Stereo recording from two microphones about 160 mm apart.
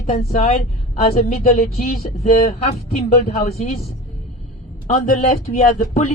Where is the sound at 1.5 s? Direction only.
65° left (ahead or behind).